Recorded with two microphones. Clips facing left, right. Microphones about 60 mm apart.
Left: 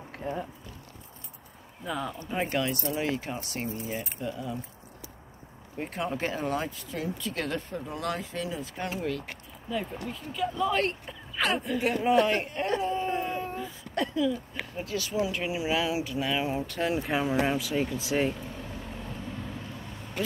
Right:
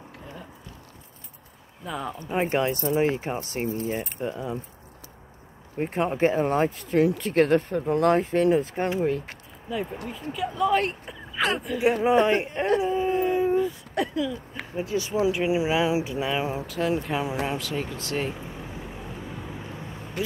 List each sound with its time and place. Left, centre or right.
0.3 s speech: left
1.9 s speech: centre
2.1 s speech: right
5.9 s speech: right
8.7 s speech: right
9.7 s speech: centre
11.8 s speech: centre
12.6 s a sound: centre
15.0 s speech: right
16.5 s speech: centre
18.3 s vehicle: centre